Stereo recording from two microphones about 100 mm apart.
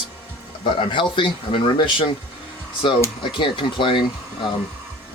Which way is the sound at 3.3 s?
55° left (ahead or behind).